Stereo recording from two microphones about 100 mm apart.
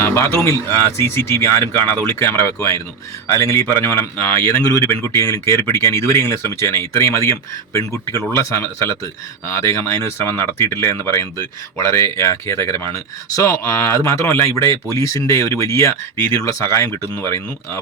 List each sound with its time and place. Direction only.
0.0 s speech: 25° left (ahead or behind)